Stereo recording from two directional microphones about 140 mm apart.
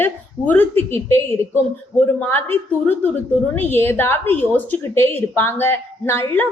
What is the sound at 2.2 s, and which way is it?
A woman's voice, 15° left (ahead or behind).